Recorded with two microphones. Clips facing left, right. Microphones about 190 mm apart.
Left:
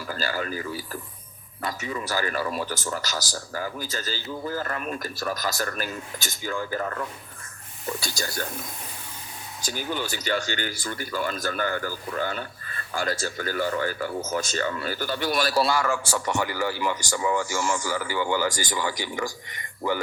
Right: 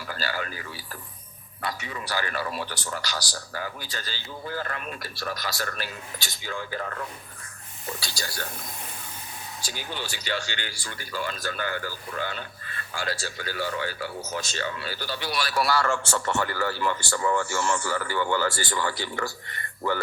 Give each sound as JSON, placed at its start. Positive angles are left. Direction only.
{"t": 0.1, "sound": "speech", "side_deg": 40}
{"t": 7.9, "sound": "speech", "side_deg": 50}
{"t": 9.7, "sound": "speech", "side_deg": 45}
{"t": 15.5, "sound": "a man's voice", "side_deg": 25}
{"t": 15.8, "sound": "speech", "side_deg": 10}